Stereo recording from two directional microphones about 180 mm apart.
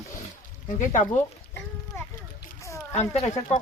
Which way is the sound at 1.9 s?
15° left (ahead or behind).